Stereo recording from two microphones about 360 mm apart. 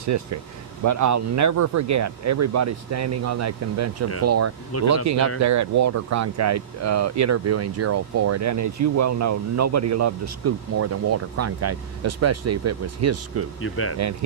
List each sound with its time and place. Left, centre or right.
0.0 s speech: right
4.7 s speech: left
5.0 s speech: right
13.6 s speech: left
14.0 s speech: right